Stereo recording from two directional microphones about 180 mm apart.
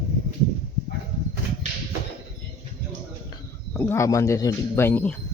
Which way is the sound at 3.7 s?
10° left (ahead or behind).